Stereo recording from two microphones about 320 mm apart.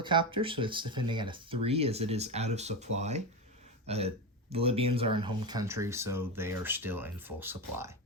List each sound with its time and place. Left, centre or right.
0.0 s speech: centre